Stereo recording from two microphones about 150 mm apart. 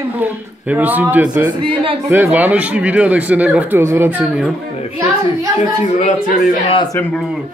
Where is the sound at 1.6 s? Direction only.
35° right (ahead or behind).